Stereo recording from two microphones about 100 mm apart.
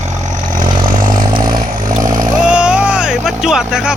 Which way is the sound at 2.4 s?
10° right (ahead or behind).